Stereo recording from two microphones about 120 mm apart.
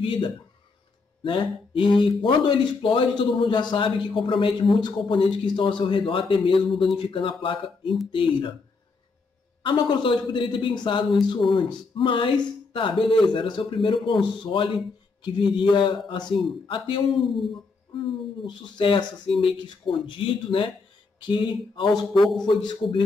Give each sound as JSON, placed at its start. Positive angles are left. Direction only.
{"t": 0.0, "sound": "a man's voice", "side_deg": 45}
{"t": 1.2, "sound": "music", "side_deg": 45}
{"t": 2.0, "sound": "a man's voice", "side_deg": 45}
{"t": 9.6, "sound": "a man's voice", "side_deg": 40}
{"t": 18.4, "sound": "a man's voice", "side_deg": 45}
{"t": 22.2, "sound": "a man's voice", "side_deg": 0}
{"t": 22.6, "sound": "speech", "side_deg": 40}